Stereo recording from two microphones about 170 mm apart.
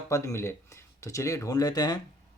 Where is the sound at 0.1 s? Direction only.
15° left (ahead or behind).